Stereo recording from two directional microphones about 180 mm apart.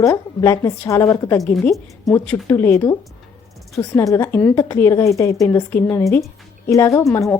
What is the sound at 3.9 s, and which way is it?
A woman's voice, 15° left (ahead or behind).